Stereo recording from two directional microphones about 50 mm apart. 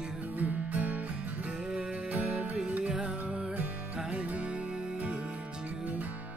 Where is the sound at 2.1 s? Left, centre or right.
Right.